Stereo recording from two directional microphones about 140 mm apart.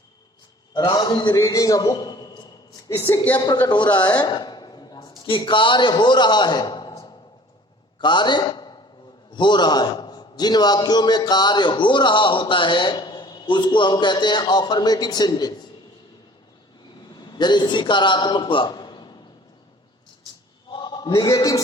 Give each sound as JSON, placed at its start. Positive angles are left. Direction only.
{"t": 0.7, "sound": "a man's voice", "side_deg": 30}
{"t": 2.9, "sound": "a woman's voice", "side_deg": 20}
{"t": 3.3, "sound": "a man's voice", "side_deg": 30}
{"t": 3.7, "sound": "a sound", "side_deg": 30}
{"t": 5.2, "sound": "a man's voice", "side_deg": 35}
{"t": 17.2, "sound": "a man's voice", "side_deg": 30}
{"t": 20.7, "sound": "a sound", "side_deg": 35}
{"t": 21.2, "sound": "a man's voice", "side_deg": 25}